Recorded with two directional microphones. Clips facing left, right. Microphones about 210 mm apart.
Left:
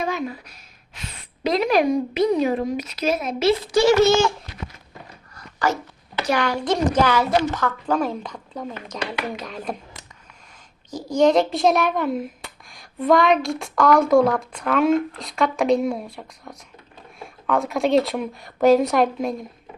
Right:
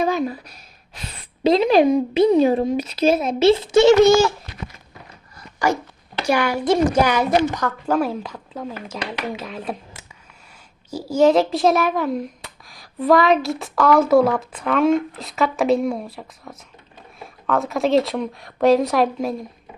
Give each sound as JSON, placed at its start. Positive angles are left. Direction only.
{"t": 0.0, "sound": "a woman's voice", "side_deg": -35}
{"t": 6.2, "sound": "a woman's voice", "side_deg": -10}